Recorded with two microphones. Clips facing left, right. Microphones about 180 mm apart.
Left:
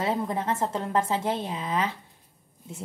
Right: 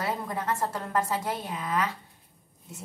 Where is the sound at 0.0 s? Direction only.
25° left (ahead or behind).